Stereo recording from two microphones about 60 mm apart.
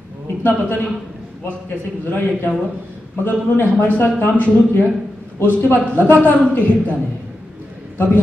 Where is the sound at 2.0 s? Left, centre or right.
Left.